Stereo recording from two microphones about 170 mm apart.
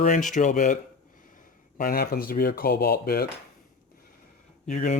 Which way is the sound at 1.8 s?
60° left (ahead or behind).